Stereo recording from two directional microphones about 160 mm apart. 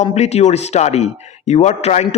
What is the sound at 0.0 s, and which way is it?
Speech, 45° left (ahead or behind).